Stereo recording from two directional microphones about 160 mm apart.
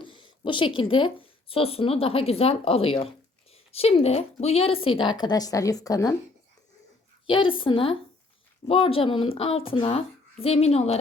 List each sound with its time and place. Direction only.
0.0 s a woman's voice: 30° left (ahead or behind)
7.3 s a woman's voice: 30° left (ahead or behind)